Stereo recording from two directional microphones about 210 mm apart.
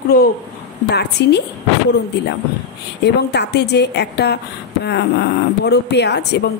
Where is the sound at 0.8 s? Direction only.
55° left (ahead or behind).